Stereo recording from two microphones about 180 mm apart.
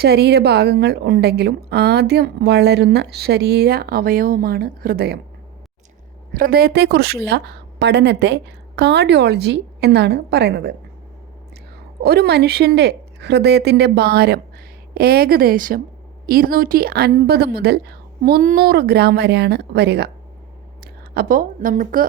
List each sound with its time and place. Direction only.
0.0 s a woman's voice: 65° right (ahead or behind)
6.3 s a woman's voice: 55° right (ahead or behind)
12.0 s a woman's voice: 60° right (ahead or behind)
18.2 s a woman's voice: 50° right (ahead or behind)